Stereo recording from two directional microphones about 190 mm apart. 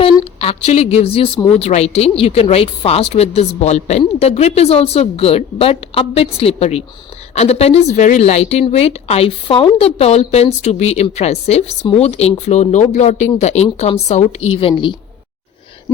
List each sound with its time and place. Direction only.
0.3 s speech: 30° left (ahead or behind)